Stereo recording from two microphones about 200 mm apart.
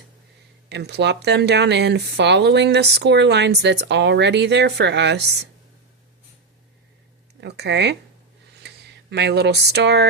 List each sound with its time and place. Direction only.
0.7 s speech: 55° right (ahead or behind)
7.4 s speech: 55° right (ahead or behind)